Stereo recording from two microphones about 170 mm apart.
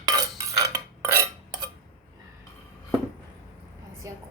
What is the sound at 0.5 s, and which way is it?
Cutlery, 20° right (ahead or behind).